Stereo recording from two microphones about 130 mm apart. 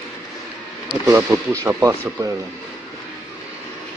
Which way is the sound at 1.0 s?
20° right (ahead or behind).